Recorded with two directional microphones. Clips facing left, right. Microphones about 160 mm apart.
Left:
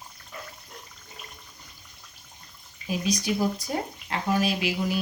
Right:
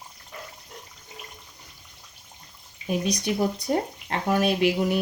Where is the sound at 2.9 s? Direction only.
55° right (ahead or behind).